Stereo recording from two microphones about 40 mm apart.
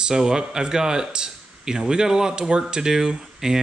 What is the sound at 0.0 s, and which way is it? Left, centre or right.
A man's voice, centre.